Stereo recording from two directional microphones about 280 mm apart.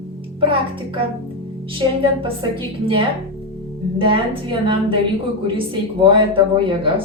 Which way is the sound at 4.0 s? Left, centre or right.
Centre.